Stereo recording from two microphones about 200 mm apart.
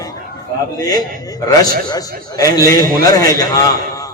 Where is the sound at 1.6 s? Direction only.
20° left (ahead or behind).